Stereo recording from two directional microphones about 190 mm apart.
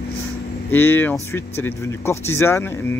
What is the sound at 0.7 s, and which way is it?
Speech, 10° left (ahead or behind).